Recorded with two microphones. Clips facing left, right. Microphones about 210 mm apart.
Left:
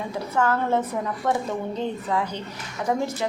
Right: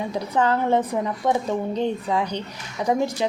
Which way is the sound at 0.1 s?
15° right (ahead or behind).